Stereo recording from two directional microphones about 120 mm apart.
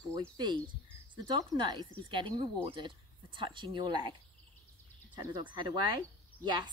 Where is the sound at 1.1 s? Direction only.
40° right (ahead or behind).